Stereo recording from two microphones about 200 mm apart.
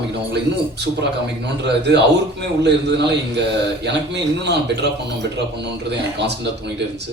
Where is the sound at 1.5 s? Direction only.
60° right (ahead or behind).